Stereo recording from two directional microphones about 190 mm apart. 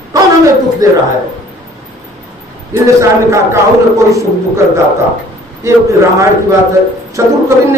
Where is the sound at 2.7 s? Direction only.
15° right (ahead or behind).